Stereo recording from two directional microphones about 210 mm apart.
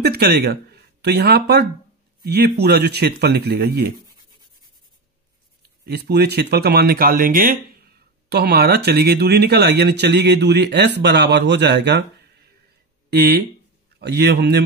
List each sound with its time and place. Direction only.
0.0 s speech: 50° right (ahead or behind)
5.9 s speech: 50° right (ahead or behind)